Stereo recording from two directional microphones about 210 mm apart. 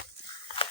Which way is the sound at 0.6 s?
25° left (ahead or behind).